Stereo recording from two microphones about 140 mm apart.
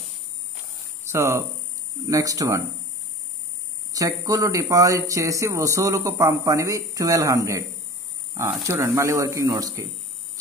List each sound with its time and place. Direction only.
1.0 s hum: 20° right (ahead or behind)
2.0 s speech: 25° right (ahead or behind)
3.9 s speech: 25° right (ahead or behind)